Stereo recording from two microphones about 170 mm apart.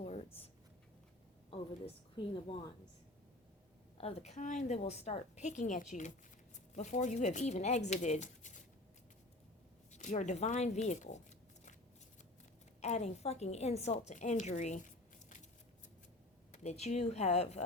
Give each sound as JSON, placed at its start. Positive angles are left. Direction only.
{"t": 0.0, "sound": "a sound", "side_deg": 40}
{"t": 1.5, "sound": "a woman's voice", "side_deg": 30}
{"t": 3.9, "sound": "a woman's voice", "side_deg": 35}
{"t": 9.9, "sound": "speech", "side_deg": 45}
{"t": 12.8, "sound": "a woman's voice", "side_deg": 40}
{"t": 16.5, "sound": "a woman's voice", "side_deg": 40}